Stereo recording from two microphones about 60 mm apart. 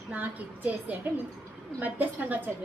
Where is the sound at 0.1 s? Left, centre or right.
Right.